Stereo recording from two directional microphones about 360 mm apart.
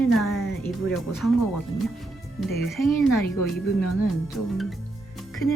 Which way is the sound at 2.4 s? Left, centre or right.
Centre.